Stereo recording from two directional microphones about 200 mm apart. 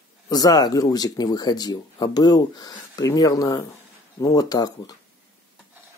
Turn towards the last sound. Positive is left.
turn(degrees=20)  # may be behind; listen again after turning